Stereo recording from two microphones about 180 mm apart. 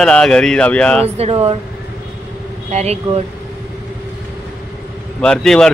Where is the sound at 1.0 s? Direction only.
35° right (ahead or behind).